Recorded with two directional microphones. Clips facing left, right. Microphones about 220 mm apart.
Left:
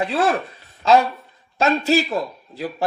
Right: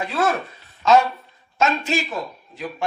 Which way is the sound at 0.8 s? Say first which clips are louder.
Even; 35° left (ahead or behind).